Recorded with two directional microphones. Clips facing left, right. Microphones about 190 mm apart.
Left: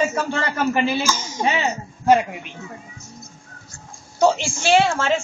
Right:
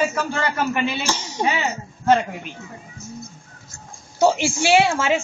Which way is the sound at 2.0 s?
10° left (ahead or behind).